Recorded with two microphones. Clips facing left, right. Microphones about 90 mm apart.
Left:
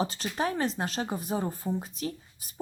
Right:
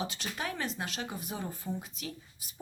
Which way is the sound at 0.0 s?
40° left (ahead or behind).